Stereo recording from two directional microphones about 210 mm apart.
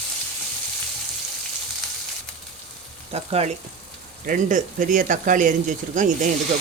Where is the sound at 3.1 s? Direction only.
30° right (ahead or behind).